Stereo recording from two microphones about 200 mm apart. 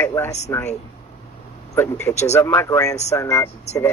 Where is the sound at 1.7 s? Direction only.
15° left (ahead or behind).